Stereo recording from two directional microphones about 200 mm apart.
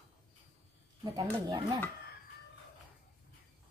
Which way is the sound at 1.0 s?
20° right (ahead or behind).